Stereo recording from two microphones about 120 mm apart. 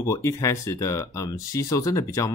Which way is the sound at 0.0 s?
25° left (ahead or behind).